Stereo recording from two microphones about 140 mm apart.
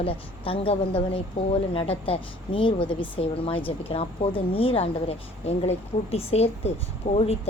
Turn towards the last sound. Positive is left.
turn(degrees=50)  # may be behind; listen again after turning